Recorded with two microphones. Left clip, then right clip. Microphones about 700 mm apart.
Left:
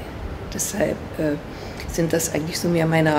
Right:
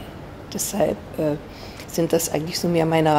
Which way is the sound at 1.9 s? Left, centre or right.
Right.